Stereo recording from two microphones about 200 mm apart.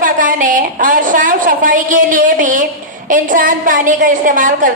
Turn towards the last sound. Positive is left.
turn(degrees=-40)  # may be behind; listen again after turning